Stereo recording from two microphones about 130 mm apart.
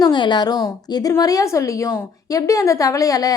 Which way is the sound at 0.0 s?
35° left (ahead or behind).